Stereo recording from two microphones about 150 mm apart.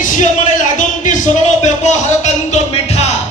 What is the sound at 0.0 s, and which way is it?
Music, 60° left (ahead or behind).